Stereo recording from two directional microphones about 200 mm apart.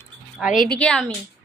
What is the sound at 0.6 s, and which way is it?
Speech, 5° left (ahead or behind).